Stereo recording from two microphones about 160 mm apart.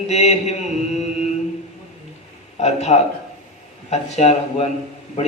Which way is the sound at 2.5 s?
45° left (ahead or behind).